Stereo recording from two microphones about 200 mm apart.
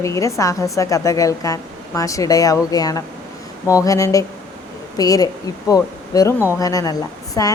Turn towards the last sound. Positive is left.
turn(degrees=20)  # may be behind; listen again after turning